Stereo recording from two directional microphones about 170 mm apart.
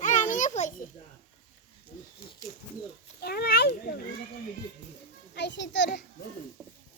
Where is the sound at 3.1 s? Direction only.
70° left (ahead or behind).